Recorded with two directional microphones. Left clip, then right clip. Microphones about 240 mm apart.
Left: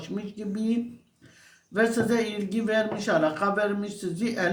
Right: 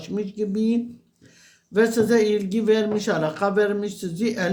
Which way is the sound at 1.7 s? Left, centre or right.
Right.